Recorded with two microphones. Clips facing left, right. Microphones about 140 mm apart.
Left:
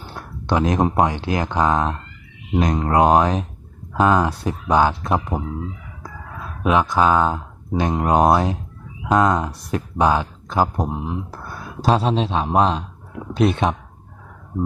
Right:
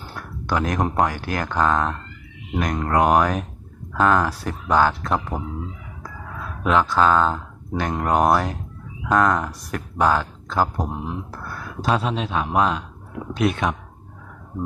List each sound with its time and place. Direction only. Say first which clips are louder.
0.1 s speech: left 3 dB; 20° left (ahead or behind)
6.6 s speech: left 1 dB; 15° left (ahead or behind)
11.8 s speech: left 4 dB; 30° left (ahead or behind)